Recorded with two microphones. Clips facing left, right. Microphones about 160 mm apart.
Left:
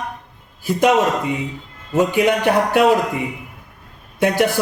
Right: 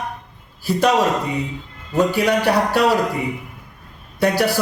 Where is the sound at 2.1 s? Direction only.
20° left (ahead or behind).